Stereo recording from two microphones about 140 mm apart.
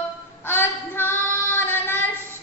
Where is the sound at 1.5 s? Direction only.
15° left (ahead or behind).